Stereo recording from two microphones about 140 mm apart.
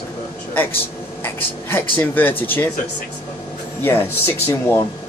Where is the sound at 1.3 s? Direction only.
15° left (ahead or behind).